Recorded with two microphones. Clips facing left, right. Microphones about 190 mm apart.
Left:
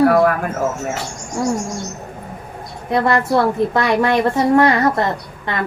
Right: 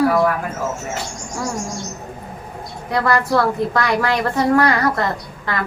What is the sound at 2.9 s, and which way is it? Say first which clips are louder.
A woman's voice: left 2 dB; 25° left (ahead or behind).